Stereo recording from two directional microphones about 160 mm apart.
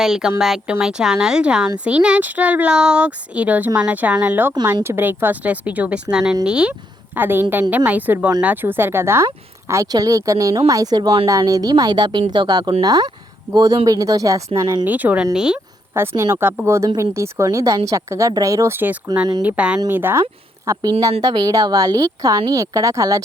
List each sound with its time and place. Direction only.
0.0 s speech: 5° right (ahead or behind); by 14.8 s 20° right (ahead or behind)
14.8 s speech: 10° right (ahead or behind)